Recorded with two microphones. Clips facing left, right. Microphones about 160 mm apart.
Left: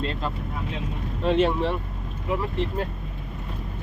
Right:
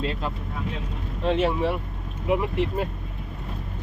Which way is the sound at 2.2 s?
15° right (ahead or behind).